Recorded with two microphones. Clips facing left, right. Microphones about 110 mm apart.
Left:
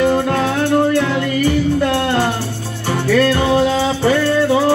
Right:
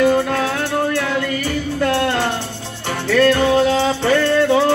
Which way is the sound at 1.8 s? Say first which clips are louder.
Left 2 dB; 15° left (ahead or behind).